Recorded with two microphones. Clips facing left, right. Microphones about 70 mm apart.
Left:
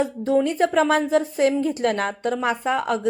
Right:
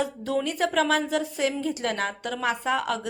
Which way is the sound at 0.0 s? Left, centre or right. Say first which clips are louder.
Left 6 dB; left.